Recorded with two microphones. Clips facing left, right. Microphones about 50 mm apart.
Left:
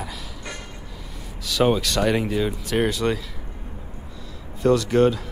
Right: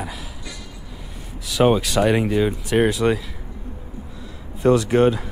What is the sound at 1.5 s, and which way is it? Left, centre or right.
Speech, centre.